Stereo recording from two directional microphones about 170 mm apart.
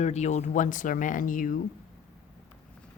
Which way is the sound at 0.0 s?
40° left (ahead or behind).